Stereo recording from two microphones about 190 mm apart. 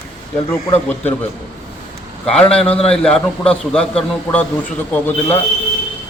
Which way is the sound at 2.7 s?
30° left (ahead or behind).